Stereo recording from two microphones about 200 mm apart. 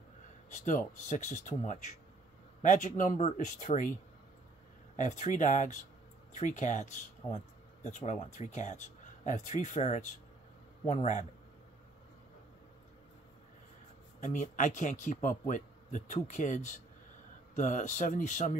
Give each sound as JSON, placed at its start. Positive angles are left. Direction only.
{"t": 0.7, "sound": "speech", "side_deg": 40}
{"t": 4.9, "sound": "speech", "side_deg": 40}
{"t": 14.2, "sound": "speech", "side_deg": 40}